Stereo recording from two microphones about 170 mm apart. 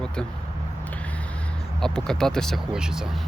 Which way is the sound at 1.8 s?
5° left (ahead or behind).